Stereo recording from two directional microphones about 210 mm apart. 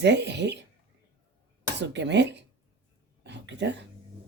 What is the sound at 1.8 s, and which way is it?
Speech, 55° right (ahead or behind).